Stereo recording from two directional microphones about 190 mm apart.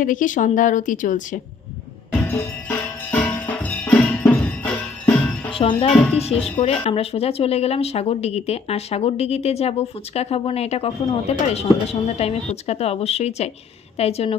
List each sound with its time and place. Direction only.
0.0 s a woman's voice: 45° left (ahead or behind)
3.1 s percussion: 10° left (ahead or behind)
5.5 s speech: 30° left (ahead or behind)